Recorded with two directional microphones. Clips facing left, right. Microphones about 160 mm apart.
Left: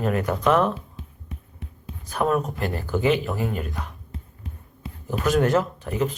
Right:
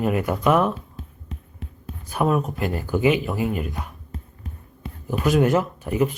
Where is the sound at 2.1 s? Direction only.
10° right (ahead or behind).